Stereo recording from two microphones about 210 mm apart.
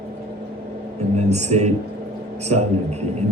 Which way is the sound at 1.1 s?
30° right (ahead or behind).